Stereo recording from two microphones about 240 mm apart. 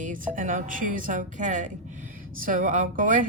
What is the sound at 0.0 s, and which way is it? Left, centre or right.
A woman's voice, right.